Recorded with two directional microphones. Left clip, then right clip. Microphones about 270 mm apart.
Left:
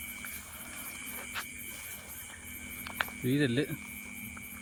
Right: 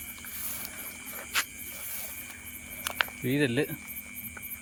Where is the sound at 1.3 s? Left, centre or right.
Right.